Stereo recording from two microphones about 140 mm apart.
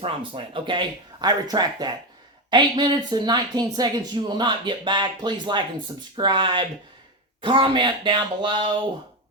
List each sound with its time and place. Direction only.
0.0 s speech: 35° right (ahead or behind)